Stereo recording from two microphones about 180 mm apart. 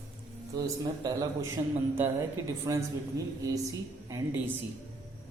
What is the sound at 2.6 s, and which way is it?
A woman's voice, 20° right (ahead or behind).